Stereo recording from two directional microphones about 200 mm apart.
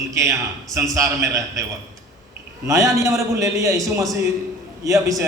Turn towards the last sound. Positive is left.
turn(degrees=-15)  # may be behind; listen again after turning